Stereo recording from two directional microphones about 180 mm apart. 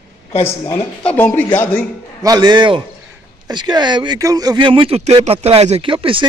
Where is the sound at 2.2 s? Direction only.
25° right (ahead or behind).